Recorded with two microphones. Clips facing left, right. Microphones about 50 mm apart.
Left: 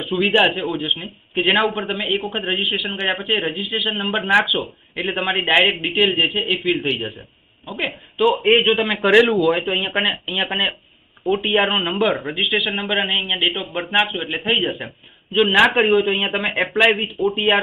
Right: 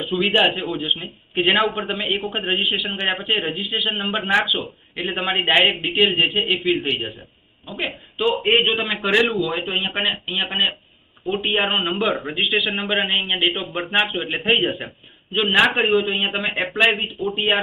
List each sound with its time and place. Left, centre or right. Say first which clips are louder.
0.0 s a man's voice: left 2 dB; centre